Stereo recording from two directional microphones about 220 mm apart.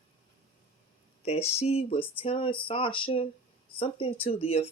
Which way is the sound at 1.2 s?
30° left (ahead or behind).